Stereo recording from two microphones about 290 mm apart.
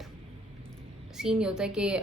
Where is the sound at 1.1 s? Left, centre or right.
Centre.